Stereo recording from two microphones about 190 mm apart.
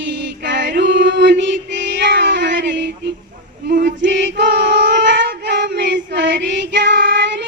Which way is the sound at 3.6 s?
60° right (ahead or behind).